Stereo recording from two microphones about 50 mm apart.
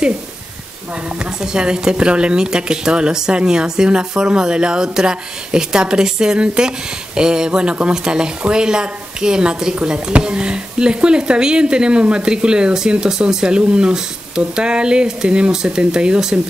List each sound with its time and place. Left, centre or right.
1.0 s a woman's voice: centre